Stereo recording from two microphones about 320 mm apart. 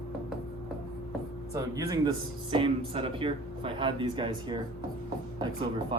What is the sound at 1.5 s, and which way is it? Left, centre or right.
Speech, centre.